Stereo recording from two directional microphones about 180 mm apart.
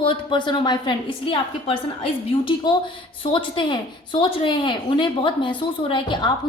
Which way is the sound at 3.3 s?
25° left (ahead or behind).